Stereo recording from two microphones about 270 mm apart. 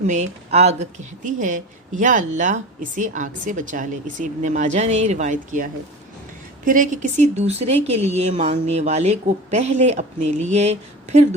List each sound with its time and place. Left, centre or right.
0.1 s speech: right
6.7 s speech: right